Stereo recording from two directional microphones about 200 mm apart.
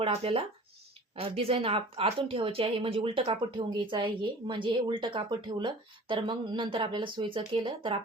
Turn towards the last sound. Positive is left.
turn(degrees=-25)  # may be behind; listen again after turning